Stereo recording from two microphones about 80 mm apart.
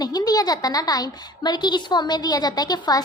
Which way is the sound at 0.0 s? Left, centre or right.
Left.